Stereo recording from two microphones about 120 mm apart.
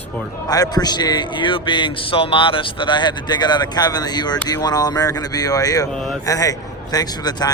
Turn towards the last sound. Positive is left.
turn(degrees=35)  # may be behind; listen again after turning